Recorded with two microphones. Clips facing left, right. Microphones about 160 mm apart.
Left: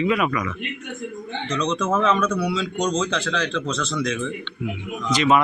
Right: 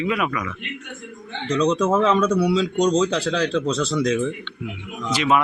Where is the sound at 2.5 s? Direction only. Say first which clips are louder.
Right 5 dB; 35° right (ahead or behind).